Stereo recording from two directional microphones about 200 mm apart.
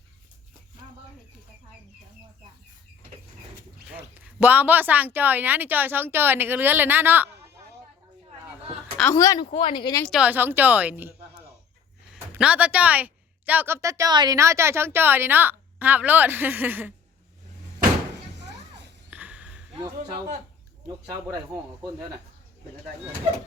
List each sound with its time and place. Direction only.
3.8 s a woman's voice: 5° right (ahead or behind)
9.1 s speech: 15° left (ahead or behind)
10.1 s a woman's voice: 5° right (ahead or behind)
12.1 s a woman's voice: 5° right (ahead or behind)
19.1 s a sound: 5° right (ahead or behind)
20.8 s a woman's voice: 15° right (ahead or behind)